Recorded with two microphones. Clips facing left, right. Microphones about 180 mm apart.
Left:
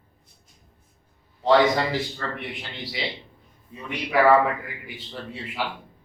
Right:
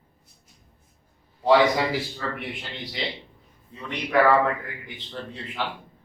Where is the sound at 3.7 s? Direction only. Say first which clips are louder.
Right 1 dB; 10° left (ahead or behind).